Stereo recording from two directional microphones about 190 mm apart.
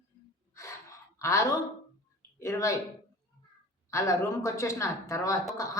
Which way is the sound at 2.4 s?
15° left (ahead or behind).